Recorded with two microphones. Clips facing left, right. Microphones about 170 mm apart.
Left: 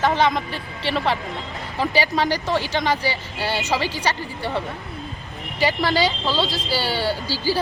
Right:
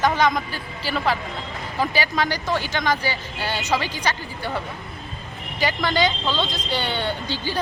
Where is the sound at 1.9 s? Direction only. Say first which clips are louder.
Left 5 dB; 35° left (ahead or behind).